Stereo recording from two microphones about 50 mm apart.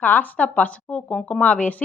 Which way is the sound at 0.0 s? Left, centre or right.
Left.